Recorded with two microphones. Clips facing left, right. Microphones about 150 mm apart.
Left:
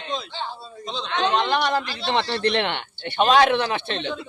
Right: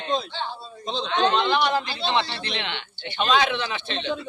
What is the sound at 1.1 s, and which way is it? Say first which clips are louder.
A man's voice: even; 50° left (ahead or behind).